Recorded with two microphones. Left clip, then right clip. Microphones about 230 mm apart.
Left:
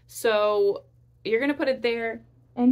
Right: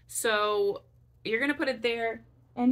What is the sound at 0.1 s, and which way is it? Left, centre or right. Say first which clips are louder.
A woman's voice: left 5 dB; centre.